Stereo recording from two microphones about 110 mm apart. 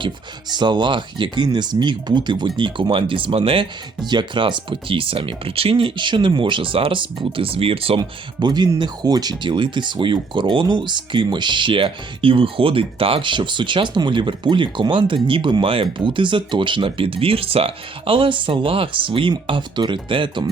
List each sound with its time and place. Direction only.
0.5 s speech: 45° right (ahead or behind)
4.0 s speech: 45° right (ahead or behind); by 8.0 s 60° right (ahead or behind)
8.4 s speech: 40° right (ahead or behind)